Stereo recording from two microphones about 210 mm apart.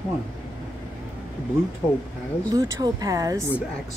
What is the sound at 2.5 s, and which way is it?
Speech, 15° right (ahead or behind).